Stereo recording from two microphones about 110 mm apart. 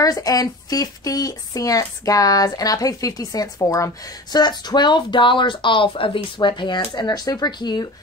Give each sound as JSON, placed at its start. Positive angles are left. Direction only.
{"t": 0.0, "sound": "speech", "side_deg": 35}